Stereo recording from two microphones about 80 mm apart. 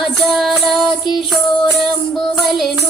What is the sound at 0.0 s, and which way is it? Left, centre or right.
Music, centre.